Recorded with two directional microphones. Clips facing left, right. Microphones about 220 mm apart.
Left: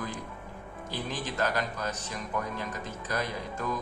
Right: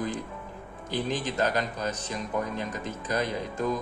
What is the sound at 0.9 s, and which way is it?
A man's voice, 20° right (ahead or behind).